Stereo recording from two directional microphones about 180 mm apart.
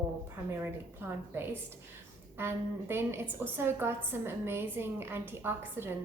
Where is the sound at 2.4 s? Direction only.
15° right (ahead or behind).